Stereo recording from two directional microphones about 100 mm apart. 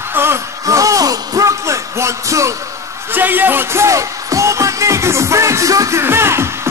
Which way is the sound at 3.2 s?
20° right (ahead or behind).